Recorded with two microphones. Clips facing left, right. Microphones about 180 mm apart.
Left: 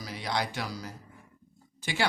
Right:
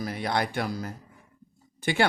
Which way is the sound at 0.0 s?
55° right (ahead or behind).